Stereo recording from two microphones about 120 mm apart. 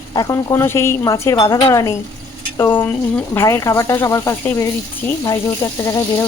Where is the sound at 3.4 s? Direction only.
25° left (ahead or behind).